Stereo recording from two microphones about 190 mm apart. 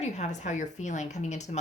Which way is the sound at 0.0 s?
35° left (ahead or behind).